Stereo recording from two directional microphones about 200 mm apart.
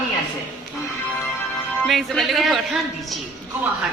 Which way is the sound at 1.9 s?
Centre (ahead or behind).